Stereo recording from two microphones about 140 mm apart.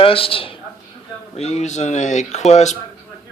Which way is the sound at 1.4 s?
50° left (ahead or behind).